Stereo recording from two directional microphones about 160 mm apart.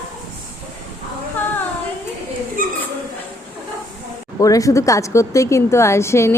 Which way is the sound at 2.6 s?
60° right (ahead or behind).